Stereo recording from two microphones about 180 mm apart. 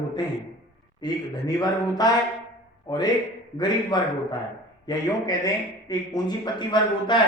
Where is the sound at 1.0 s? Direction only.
20° left (ahead or behind).